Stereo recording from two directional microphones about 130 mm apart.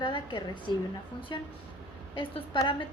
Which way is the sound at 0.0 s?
40° left (ahead or behind).